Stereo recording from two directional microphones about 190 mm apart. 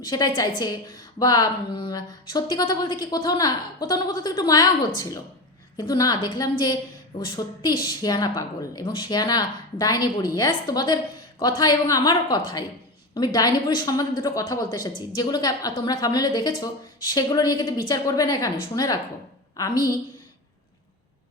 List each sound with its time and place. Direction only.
0.0 s speech: 20° left (ahead or behind)
5.7 s speech: 20° left (ahead or behind)